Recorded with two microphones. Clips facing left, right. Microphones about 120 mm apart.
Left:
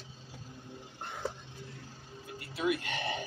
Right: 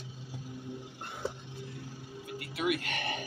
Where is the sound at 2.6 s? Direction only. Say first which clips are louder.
Even; 30° left (ahead or behind).